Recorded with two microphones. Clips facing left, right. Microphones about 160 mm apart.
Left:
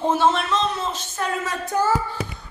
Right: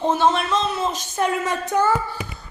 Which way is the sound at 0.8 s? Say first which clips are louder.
Right 5 dB; 15° right (ahead or behind).